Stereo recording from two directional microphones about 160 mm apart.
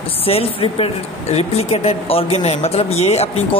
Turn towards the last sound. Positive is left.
turn(degrees=40)  # may be behind; listen again after turning